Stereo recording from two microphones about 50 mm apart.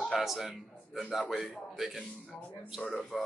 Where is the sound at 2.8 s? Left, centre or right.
Left.